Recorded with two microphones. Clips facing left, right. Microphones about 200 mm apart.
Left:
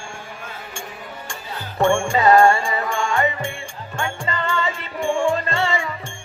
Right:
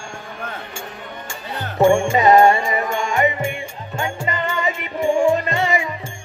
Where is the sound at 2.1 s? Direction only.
20° right (ahead or behind).